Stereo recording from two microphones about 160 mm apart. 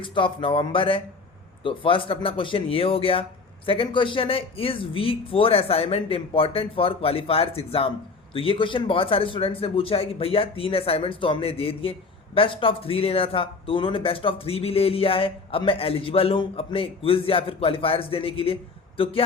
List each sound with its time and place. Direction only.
0.0 s a man's voice: 30° left (ahead or behind)